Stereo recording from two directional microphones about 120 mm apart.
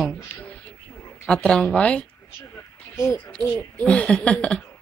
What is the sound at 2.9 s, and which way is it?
Speech, 25° left (ahead or behind).